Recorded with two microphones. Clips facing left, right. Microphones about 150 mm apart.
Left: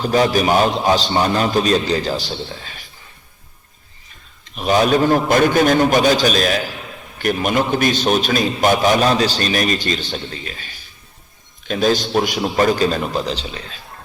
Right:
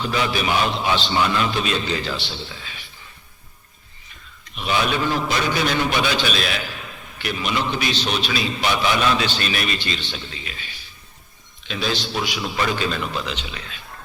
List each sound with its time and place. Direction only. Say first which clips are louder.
0.0 s a man's voice: left 7 dB; 40° left (ahead or behind)
4.5 s a man's voice: left 7 dB; 40° left (ahead or behind)
11.7 s a man's voice: left 9 dB; 45° left (ahead or behind)